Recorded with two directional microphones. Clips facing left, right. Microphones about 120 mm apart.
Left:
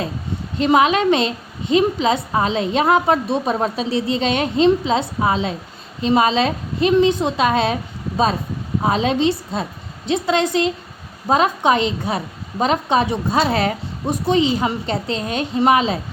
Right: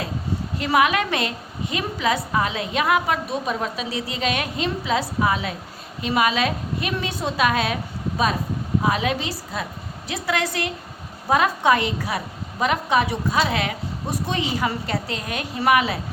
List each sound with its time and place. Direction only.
0.6 s a woman's voice: 25° left (ahead or behind)
8.8 s a woman's voice: 30° left (ahead or behind)
14.1 s a woman's voice: 20° left (ahead or behind)